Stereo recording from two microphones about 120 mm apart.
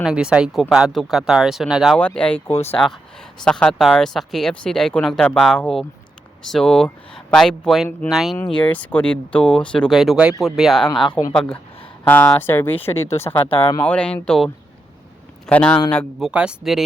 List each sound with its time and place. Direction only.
0.0 s speech: 5° right (ahead or behind)
2.0 s speech: 10° left (ahead or behind)
2.5 s speech: 60° left (ahead or behind)
3.4 s speech: 5° left (ahead or behind)
8.4 s speech: 10° left (ahead or behind)
10.8 s speech: 40° left (ahead or behind)
11.3 s speech: 10° left (ahead or behind)
13.3 s speech: 35° left (ahead or behind)
13.8 s speech: 10° left (ahead or behind)
16.2 s speech: 10° right (ahead or behind)